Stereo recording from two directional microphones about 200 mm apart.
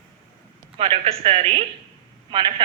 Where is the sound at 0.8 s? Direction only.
30° right (ahead or behind).